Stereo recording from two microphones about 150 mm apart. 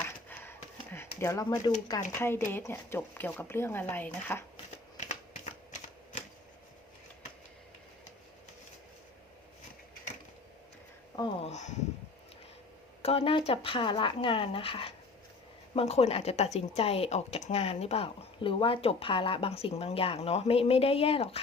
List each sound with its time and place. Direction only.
1.2 s speech: 20° left (ahead or behind)
2.0 s speech: 15° left (ahead or behind)
11.4 s sniff: 50° left (ahead or behind)
13.0 s speech: 40° left (ahead or behind)